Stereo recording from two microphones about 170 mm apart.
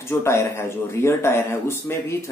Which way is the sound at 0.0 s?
15° left (ahead or behind).